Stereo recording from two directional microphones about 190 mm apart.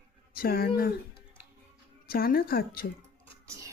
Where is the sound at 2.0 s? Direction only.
50° left (ahead or behind).